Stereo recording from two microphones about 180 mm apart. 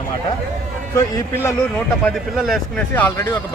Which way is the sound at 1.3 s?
15° left (ahead or behind).